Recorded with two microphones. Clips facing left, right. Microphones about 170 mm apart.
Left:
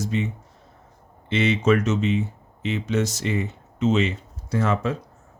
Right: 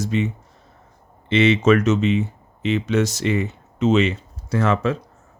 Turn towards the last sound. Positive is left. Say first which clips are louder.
# right 3 dB
turn(degrees=-80)